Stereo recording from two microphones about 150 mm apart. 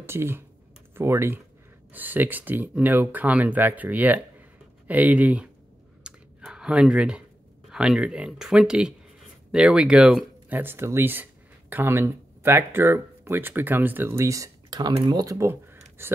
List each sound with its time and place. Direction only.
0.0 s speech: 15° right (ahead or behind)
6.0 s clicking: 5° right (ahead or behind)
7.7 s speech: 5° right (ahead or behind)